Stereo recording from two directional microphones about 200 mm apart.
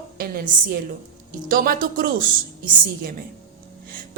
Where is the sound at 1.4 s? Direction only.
45° right (ahead or behind).